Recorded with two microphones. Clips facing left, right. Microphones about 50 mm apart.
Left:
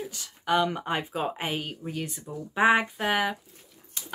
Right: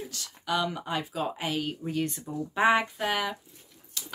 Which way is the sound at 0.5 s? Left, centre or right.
Left.